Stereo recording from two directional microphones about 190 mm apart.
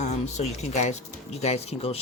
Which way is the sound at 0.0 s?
35° left (ahead or behind).